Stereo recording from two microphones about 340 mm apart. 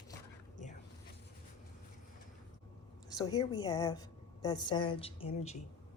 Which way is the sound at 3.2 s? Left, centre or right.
Centre.